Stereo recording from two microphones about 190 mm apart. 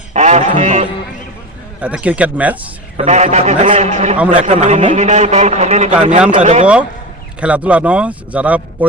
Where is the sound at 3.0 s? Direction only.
30° right (ahead or behind).